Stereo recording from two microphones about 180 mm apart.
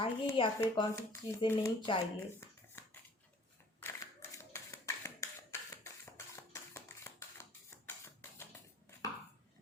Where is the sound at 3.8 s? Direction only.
15° left (ahead or behind).